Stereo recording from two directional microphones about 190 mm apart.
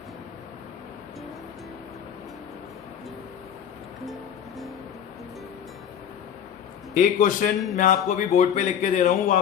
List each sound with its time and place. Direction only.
6.9 s a man's voice: 40° left (ahead or behind)